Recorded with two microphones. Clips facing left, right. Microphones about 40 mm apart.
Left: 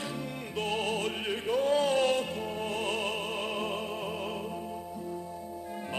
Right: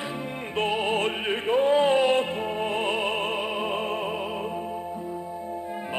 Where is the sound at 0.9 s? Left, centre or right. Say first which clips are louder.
Right 6 dB; right.